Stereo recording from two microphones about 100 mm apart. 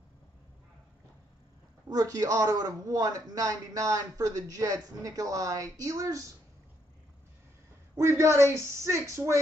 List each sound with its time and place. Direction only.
1.9 s a man's voice: 35° right (ahead or behind)
7.9 s speech: 30° right (ahead or behind)